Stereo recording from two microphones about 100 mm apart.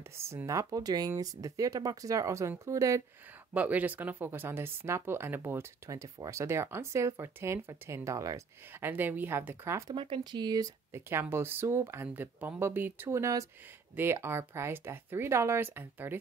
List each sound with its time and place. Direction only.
0.2 s speech: 25° right (ahead or behind)
3.5 s speech: 15° right (ahead or behind); by 8.4 s 35° right (ahead or behind)
8.8 s speech: 20° right (ahead or behind)
9.9 s speech: 60° right (ahead or behind)
10.4 s speech: 40° right (ahead or behind)
10.9 s speech: 25° right (ahead or behind)